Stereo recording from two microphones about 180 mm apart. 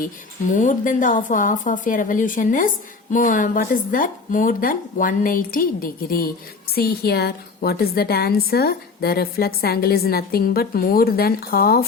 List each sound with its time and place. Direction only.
0.0 s a woman's voice: 45° left (ahead or behind)